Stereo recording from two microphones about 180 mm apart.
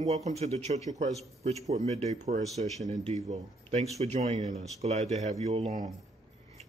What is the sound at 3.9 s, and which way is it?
A man's voice, 40° right (ahead or behind).